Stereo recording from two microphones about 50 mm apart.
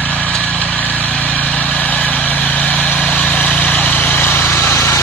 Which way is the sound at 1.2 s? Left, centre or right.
Left.